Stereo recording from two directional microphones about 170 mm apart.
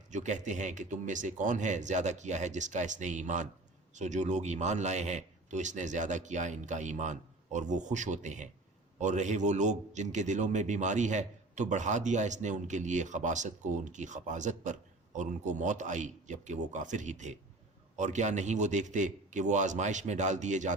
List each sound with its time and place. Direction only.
0.1 s a man's voice: 45° right (ahead or behind)